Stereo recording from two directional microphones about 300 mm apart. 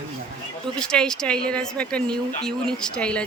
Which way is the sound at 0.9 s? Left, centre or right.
Centre.